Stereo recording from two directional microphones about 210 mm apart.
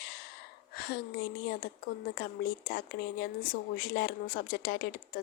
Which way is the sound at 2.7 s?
45° left (ahead or behind).